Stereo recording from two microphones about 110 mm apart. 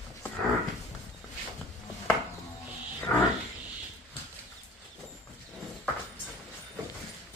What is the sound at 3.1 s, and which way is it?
Wild animals, 20° left (ahead or behind).